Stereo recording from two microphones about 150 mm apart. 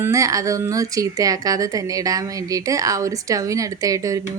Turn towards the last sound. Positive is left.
turn(degrees=-25)  # may be behind; listen again after turning